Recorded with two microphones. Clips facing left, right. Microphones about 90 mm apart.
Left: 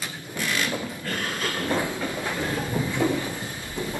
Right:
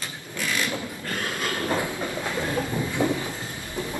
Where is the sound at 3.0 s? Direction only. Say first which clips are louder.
Even; 20° right (ahead or behind).